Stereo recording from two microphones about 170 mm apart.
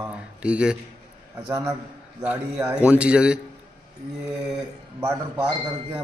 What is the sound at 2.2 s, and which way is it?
Speech, 10° right (ahead or behind).